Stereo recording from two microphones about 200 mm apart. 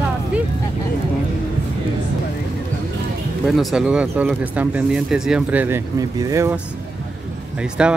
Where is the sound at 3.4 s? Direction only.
Centre (ahead or behind).